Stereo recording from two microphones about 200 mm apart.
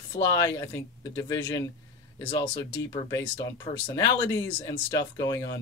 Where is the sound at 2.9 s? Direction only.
20° left (ahead or behind).